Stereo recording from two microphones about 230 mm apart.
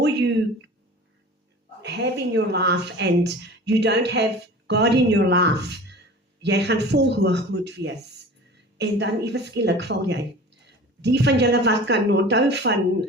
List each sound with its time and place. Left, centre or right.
0.0 s speech: right
1.8 s speech: right